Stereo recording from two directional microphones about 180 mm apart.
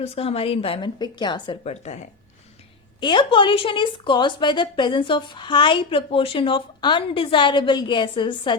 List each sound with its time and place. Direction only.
0.0 s a woman's voice: 35° left (ahead or behind)
3.0 s a woman's voice: 25° left (ahead or behind)